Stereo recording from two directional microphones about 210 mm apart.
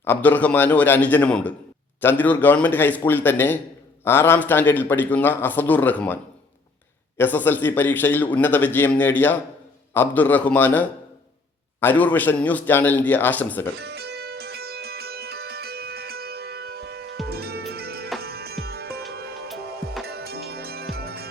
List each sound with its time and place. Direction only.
0.0 s a man's voice: 10° left (ahead or behind)
7.2 s a man's voice: 10° left (ahead or behind)
13.7 s music: 50° right (ahead or behind)
20.1 s music: 50° right (ahead or behind)